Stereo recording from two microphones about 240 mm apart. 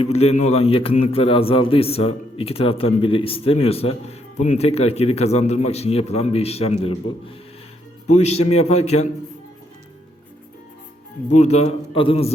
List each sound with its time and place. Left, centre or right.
0.0 s a man's voice: left
11.3 s a man's voice: left